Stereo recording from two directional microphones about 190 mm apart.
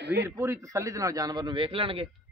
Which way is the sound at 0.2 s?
15° right (ahead or behind).